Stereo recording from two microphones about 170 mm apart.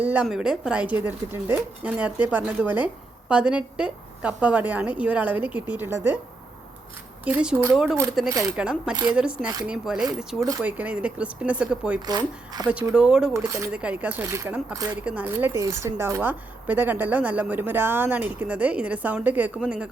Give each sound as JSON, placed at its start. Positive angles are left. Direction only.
{"t": 0.0, "sound": "speech", "side_deg": -10}
{"t": 7.3, "sound": "speech", "side_deg": -10}
{"t": 12.0, "sound": "speech", "side_deg": -25}
{"t": 12.9, "sound": "speech", "side_deg": -5}